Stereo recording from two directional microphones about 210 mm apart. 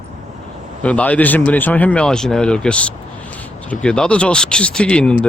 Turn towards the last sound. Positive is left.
turn(degrees=5)  # may be behind; listen again after turning